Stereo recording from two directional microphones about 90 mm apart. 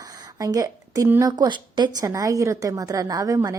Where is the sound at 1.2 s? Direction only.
50° right (ahead or behind).